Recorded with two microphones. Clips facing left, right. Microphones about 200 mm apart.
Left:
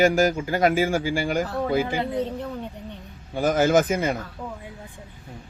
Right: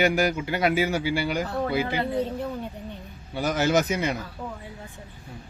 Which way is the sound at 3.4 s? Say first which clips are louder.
Left 4 dB; 50° left (ahead or behind).